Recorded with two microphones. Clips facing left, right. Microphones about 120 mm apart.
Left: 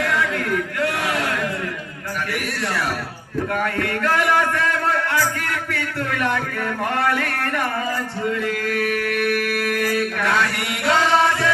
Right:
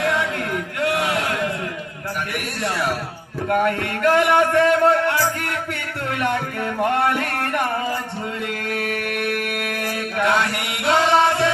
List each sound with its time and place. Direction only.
0.0 s chant: 25° right (ahead or behind)
3.5 s a sound: 25° right (ahead or behind)
8.6 s mantra: 25° right (ahead or behind)